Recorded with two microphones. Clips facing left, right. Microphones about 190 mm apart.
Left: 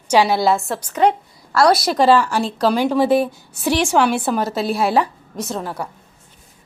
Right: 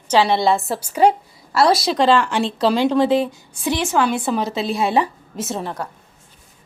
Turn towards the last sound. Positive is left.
turn(degrees=-5)  # may be behind; listen again after turning